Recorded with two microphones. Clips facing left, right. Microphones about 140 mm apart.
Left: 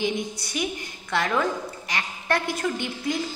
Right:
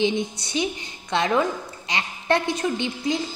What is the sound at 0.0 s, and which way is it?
A woman's voice, 25° right (ahead or behind).